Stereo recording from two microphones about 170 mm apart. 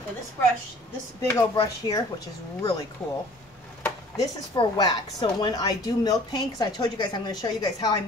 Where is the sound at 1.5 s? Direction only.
20° left (ahead or behind).